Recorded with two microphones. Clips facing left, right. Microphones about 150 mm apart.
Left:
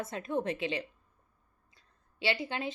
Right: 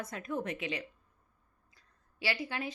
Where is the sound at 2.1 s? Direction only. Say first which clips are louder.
Left 3 dB; 25° left (ahead or behind).